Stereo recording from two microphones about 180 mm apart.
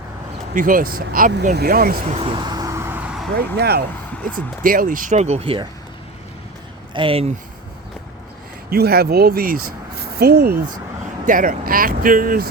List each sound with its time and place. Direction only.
0.5 s speech: 50° right (ahead or behind)
2.0 s vehicle: 30° right (ahead or behind); by 3.2 s 5° right (ahead or behind)
3.3 s speech: 60° right (ahead or behind)
4.6 s speech: 50° right (ahead or behind); by 5.6 s 30° right (ahead or behind)
6.9 s speech: 30° right (ahead or behind)
8.7 s speech: 60° right (ahead or behind)
11.3 s speech: 50° right (ahead or behind)